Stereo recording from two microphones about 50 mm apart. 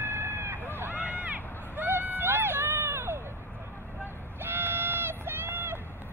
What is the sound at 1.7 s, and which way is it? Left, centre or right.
Hubbub, right.